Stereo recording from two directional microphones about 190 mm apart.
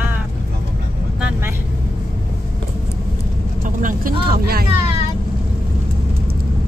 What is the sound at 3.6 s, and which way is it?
Speech, 45° right (ahead or behind).